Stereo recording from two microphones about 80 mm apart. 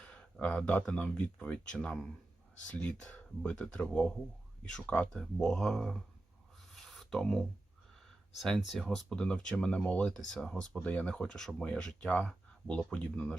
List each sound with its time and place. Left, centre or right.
0.0 s speech: centre
6.6 s a sound: centre
8.4 s speech: centre
9.0 s speech: centre
12.3 s a sound: centre
12.9 s speech: centre